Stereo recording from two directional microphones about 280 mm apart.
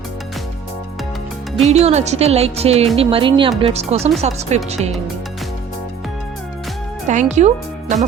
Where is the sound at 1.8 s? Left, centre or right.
Right.